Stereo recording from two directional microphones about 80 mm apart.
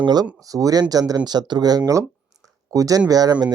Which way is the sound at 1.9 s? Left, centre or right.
Right.